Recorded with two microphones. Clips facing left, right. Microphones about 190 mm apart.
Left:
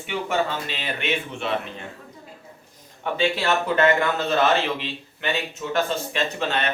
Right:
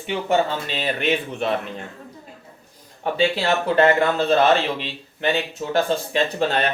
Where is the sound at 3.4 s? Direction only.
35° right (ahead or behind).